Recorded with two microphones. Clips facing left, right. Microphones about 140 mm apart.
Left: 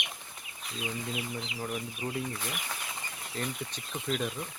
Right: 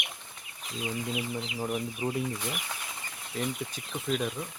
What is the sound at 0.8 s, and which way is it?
Speech, 20° right (ahead or behind).